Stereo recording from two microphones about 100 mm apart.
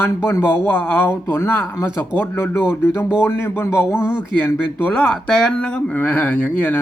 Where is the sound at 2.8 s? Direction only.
25° left (ahead or behind).